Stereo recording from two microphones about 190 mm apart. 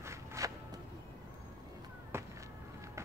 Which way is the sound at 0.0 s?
15° right (ahead or behind).